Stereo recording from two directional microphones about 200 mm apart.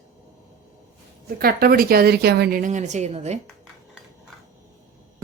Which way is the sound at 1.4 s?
50° right (ahead or behind).